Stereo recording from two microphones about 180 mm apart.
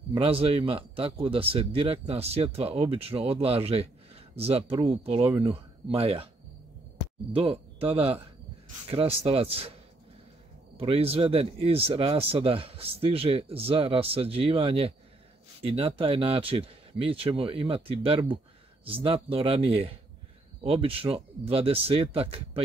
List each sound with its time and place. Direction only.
0.1 s speech: 30° right (ahead or behind)
7.3 s speech: 35° right (ahead or behind)
10.8 s speech: 30° right (ahead or behind)